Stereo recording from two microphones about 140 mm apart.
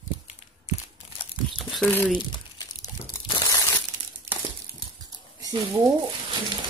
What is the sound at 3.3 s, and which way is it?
Crushing, 25° left (ahead or behind).